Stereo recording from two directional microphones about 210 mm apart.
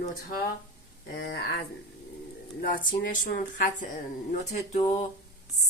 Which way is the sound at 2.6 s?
40° left (ahead or behind).